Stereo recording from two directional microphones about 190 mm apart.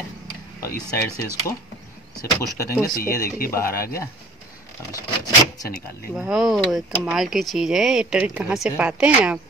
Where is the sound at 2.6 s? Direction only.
15° left (ahead or behind).